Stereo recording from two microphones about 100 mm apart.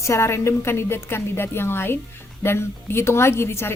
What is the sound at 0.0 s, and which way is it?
A woman's voice, 25° left (ahead or behind).